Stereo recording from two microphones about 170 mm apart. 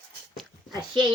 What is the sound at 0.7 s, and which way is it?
Speech, 25° right (ahead or behind).